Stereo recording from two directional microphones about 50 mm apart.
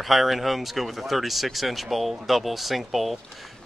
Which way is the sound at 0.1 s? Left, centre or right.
Centre.